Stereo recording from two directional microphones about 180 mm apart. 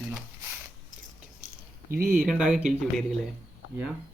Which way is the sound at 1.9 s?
55° right (ahead or behind).